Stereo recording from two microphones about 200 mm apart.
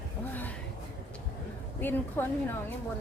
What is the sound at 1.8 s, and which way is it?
Speech, 10° left (ahead or behind).